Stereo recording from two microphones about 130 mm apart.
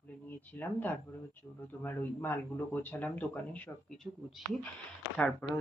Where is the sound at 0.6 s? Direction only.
15° left (ahead or behind).